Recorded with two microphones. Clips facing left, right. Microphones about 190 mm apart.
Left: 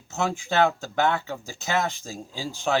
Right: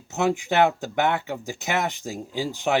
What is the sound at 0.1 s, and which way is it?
Speech, 20° right (ahead or behind).